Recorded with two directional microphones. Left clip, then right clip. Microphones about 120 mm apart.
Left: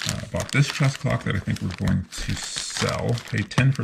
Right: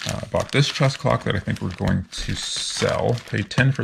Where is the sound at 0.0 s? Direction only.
5° left (ahead or behind).